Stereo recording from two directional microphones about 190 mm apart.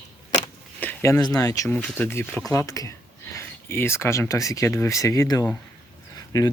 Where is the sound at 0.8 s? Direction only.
10° left (ahead or behind).